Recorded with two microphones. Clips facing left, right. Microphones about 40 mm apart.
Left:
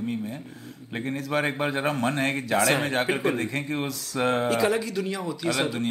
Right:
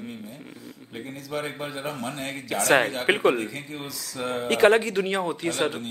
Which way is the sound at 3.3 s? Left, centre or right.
Left.